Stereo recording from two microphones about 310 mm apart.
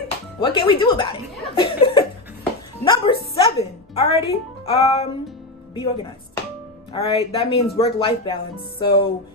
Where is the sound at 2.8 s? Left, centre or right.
Centre.